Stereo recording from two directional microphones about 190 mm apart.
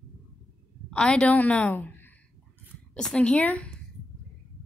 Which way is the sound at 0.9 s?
5° left (ahead or behind).